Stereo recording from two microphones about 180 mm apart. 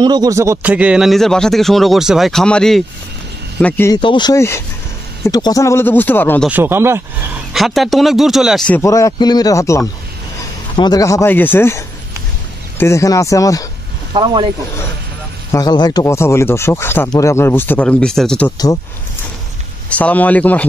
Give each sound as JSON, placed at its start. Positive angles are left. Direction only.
{"t": 0.0, "sound": "speech", "side_deg": -20}
{"t": 3.9, "sound": "speech", "side_deg": 25}
{"t": 6.5, "sound": "speech", "side_deg": -10}
{"t": 7.5, "sound": "speech", "side_deg": 0}
{"t": 8.8, "sound": "speech", "side_deg": 20}
{"t": 14.1, "sound": "speech", "side_deg": -25}
{"t": 15.5, "sound": "speech", "side_deg": 20}
{"t": 19.9, "sound": "speech", "side_deg": 10}